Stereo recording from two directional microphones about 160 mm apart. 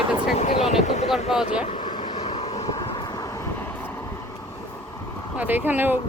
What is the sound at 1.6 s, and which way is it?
Vehicle, 30° left (ahead or behind).